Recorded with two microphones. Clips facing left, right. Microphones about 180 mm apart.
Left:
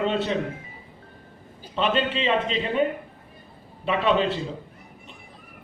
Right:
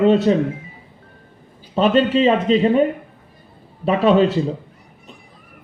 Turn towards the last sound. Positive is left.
turn(degrees=-40)  # may be behind; listen again after turning